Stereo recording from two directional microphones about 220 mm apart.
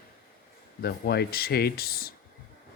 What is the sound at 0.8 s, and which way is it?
Speech, 45° left (ahead or behind).